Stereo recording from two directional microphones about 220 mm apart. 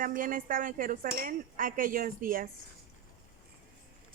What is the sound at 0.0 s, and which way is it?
Cutlery, 40° right (ahead or behind).